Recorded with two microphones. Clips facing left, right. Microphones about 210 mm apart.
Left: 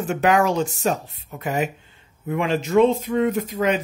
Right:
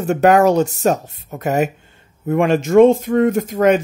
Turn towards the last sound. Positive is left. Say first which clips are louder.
# right 7 dB
turn(degrees=-50)  # may be behind; listen again after turning